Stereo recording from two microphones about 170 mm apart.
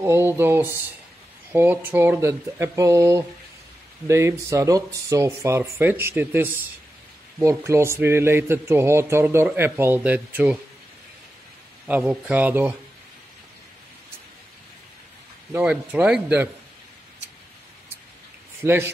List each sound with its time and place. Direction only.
0.0 s speech: 15° right (ahead or behind)
11.9 s speech: 5° right (ahead or behind)
15.5 s speech: 10° right (ahead or behind)
18.6 s speech: 15° right (ahead or behind)